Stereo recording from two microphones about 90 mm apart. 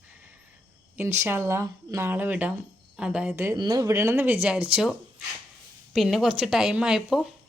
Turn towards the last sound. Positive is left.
turn(degrees=5)  # may be behind; listen again after turning